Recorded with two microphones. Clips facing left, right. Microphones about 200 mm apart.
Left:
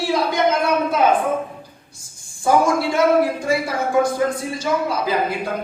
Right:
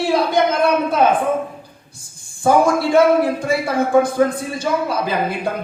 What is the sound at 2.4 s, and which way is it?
Speech, 55° right (ahead or behind).